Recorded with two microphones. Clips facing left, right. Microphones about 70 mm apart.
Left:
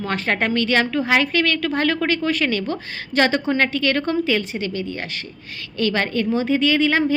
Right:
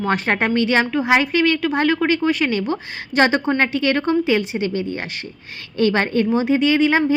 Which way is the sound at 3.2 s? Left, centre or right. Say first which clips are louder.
Right 2 dB; right.